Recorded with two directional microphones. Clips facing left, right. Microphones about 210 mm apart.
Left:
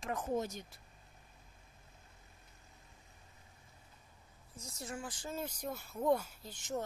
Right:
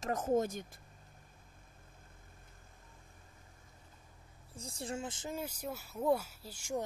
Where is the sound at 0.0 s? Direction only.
45° right (ahead or behind).